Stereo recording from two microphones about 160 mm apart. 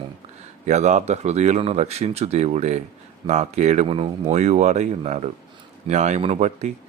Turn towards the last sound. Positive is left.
turn(degrees=-45)  # may be behind; listen again after turning